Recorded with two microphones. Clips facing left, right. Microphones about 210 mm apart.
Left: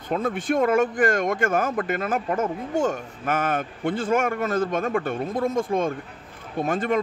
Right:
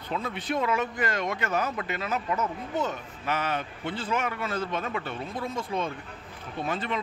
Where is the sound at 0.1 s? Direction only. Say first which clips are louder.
Left 7 dB; 50° left (ahead or behind).